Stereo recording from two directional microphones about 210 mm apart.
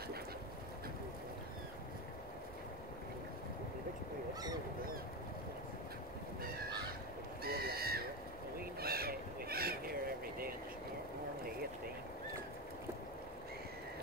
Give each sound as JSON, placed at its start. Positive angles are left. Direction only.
{"t": 7.4, "sound": "neigh", "side_deg": -45}
{"t": 8.5, "sound": "owl", "side_deg": -45}